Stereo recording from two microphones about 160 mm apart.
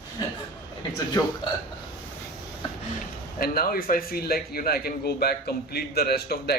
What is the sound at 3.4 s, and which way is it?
Speech, 70° left (ahead or behind).